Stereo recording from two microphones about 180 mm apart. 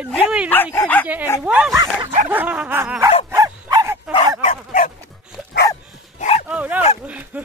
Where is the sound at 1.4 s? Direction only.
5° right (ahead or behind).